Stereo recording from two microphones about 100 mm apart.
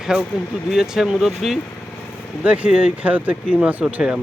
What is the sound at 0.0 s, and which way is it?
Speech, 5° right (ahead or behind).